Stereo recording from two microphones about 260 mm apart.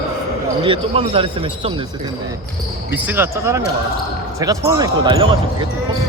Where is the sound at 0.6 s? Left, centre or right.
Right.